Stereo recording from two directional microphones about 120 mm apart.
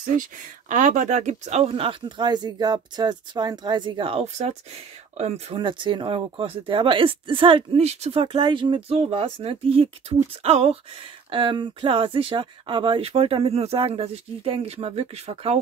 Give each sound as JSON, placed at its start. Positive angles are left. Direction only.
{"t": 0.7, "sound": "speech", "side_deg": -90}
{"t": 5.6, "sound": "speech", "side_deg": -45}
{"t": 11.2, "sound": "speech", "side_deg": -45}